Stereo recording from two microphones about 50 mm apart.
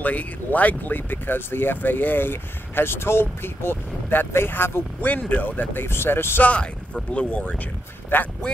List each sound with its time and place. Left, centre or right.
0.0 s speech: left
5.0 s speech: left
5.7 s speech: left
6.4 s speech: left
8.1 s speech: left